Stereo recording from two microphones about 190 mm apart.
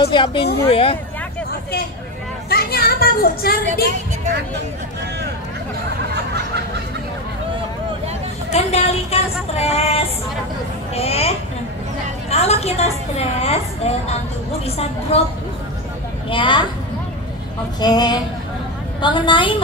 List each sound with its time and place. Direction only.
0.0 s speech: 25° left (ahead or behind)
2.5 s speech: 55° left (ahead or behind)
8.5 s a woman's voice: 35° left (ahead or behind)
16.3 s speech: 25° left (ahead or behind)
17.7 s speech: 20° left (ahead or behind)